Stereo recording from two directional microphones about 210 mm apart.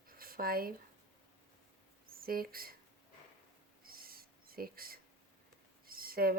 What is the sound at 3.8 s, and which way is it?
Owl, 45° right (ahead or behind).